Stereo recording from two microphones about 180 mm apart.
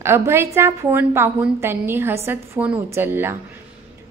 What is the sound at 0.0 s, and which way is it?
A woman's voice, 15° right (ahead or behind).